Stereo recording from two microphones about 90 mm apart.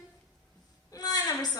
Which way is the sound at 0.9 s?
45° left (ahead or behind).